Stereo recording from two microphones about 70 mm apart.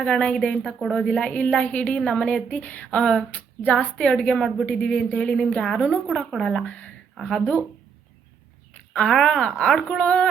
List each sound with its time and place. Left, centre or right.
0.0 s a woman's voice: centre
3.0 s a woman's voice: centre
6.7 s speech: centre
8.9 s a woman's voice: centre